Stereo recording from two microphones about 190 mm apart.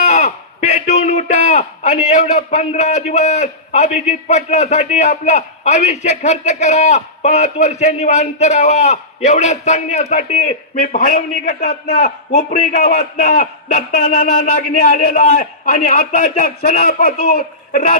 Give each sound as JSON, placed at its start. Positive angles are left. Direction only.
{"t": 0.0, "sound": "a man's voice", "side_deg": 35}